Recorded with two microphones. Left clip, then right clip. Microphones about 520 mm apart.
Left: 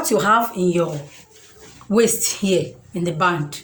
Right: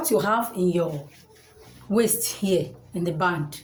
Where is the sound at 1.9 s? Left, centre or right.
Right.